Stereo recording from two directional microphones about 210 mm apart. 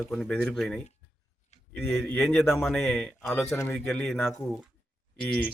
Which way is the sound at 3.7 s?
Centre (ahead or behind).